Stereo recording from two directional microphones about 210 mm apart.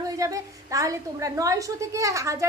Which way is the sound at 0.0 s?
15° right (ahead or behind).